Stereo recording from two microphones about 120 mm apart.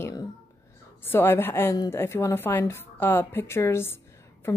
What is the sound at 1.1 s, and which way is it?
A woman's voice, 20° left (ahead or behind).